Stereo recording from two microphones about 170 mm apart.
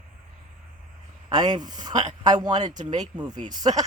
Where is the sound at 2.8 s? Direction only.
45° right (ahead or behind).